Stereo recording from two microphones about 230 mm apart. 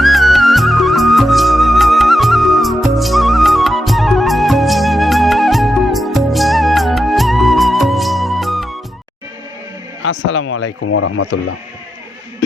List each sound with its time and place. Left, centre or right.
0.0 s music: centre
10.0 s speech: left